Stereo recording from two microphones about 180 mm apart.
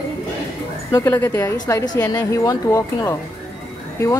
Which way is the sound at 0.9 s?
15° left (ahead or behind).